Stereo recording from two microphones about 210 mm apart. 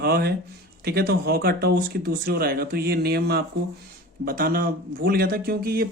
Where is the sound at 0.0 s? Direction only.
50° right (ahead or behind).